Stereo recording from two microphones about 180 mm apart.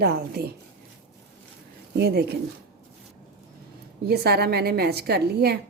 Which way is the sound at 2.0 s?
65° right (ahead or behind).